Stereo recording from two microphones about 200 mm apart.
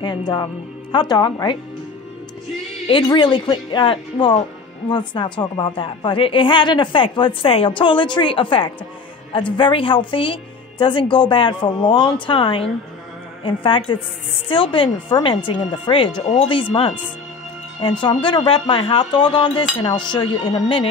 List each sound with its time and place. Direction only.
0.0 s a woman's voice: 20° left (ahead or behind)
2.9 s a woman's voice: 25° left (ahead or behind)